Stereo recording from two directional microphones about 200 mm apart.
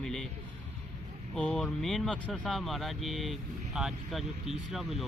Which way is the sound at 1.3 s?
5° left (ahead or behind).